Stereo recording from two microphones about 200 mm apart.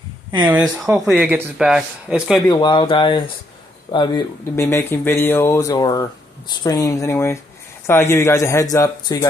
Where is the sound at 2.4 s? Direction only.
20° left (ahead or behind).